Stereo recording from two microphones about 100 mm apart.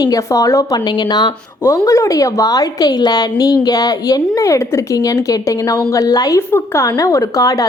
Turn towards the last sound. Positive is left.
turn(degrees=35)  # may be behind; listen again after turning